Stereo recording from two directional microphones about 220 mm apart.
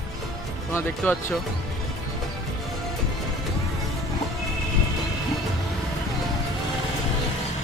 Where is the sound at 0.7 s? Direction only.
10° left (ahead or behind).